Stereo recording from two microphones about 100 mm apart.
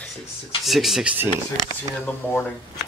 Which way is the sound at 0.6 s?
Centre (ahead or behind).